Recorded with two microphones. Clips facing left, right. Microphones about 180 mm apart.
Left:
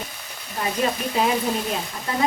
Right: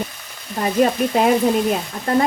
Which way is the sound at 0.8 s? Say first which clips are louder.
Right 7 dB; 55° right (ahead or behind).